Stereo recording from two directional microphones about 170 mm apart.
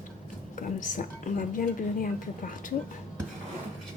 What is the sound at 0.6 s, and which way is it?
A woman's voice, 50° left (ahead or behind).